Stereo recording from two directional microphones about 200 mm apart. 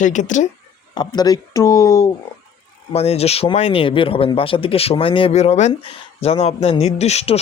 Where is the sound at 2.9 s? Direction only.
30° left (ahead or behind).